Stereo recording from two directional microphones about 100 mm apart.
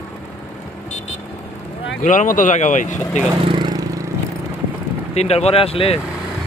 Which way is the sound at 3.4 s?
50° right (ahead or behind).